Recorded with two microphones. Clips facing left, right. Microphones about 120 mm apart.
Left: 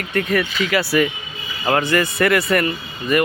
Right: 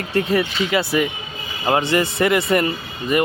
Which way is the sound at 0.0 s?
30° right (ahead or behind).